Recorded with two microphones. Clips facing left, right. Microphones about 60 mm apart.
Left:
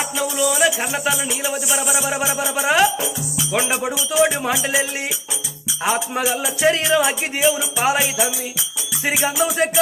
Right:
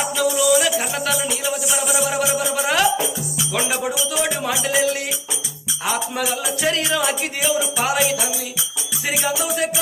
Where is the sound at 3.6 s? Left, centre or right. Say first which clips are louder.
Even; centre.